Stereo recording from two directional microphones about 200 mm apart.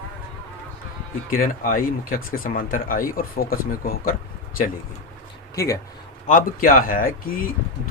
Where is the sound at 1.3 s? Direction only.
45° left (ahead or behind).